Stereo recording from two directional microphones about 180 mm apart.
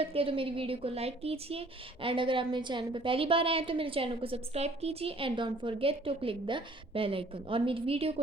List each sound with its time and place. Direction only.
0.0 s speech: 30° right (ahead or behind)